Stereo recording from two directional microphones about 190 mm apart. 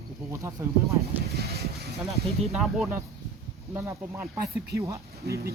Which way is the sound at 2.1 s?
Centre (ahead or behind).